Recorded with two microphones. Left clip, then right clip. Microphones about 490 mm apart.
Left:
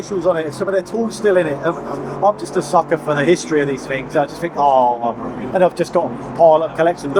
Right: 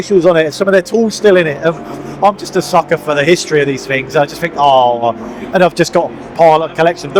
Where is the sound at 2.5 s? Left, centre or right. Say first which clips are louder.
Right 4 dB; right.